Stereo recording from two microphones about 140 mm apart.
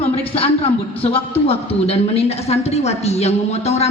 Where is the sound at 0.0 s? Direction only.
45° left (ahead or behind).